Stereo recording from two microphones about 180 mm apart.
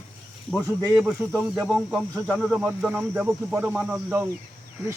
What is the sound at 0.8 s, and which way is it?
Speech, 20° right (ahead or behind).